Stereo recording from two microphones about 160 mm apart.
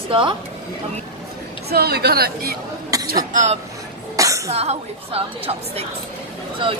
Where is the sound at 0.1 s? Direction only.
30° right (ahead or behind).